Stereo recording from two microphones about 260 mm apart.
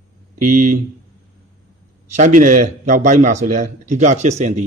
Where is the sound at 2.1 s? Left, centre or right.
Right.